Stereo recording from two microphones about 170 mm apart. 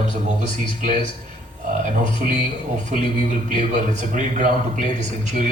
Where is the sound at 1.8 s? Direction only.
45° right (ahead or behind).